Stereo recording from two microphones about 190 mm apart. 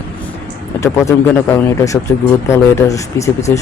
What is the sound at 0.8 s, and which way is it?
Speech, 15° left (ahead or behind).